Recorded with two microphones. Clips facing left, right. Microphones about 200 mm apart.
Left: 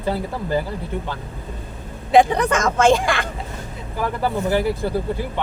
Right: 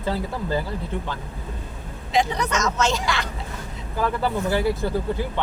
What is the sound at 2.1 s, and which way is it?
Speech, 55° left (ahead or behind).